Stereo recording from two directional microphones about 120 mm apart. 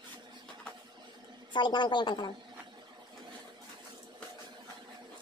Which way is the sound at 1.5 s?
40° left (ahead or behind).